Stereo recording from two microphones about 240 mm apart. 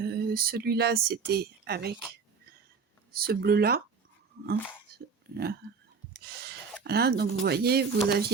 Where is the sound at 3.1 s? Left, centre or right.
Right.